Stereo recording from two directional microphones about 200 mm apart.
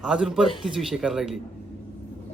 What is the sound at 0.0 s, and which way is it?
A man's voice, 5° right (ahead or behind).